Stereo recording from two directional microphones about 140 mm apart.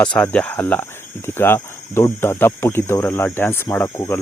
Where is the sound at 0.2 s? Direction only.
10° left (ahead or behind).